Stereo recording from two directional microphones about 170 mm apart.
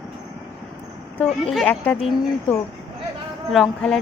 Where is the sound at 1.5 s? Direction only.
5° left (ahead or behind).